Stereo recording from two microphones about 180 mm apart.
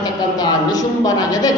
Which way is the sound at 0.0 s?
20° left (ahead or behind).